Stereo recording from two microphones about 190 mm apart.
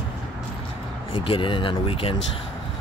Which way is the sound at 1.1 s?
25° left (ahead or behind).